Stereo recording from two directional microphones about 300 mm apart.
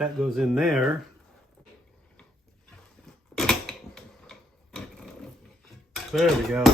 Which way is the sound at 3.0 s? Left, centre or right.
Centre.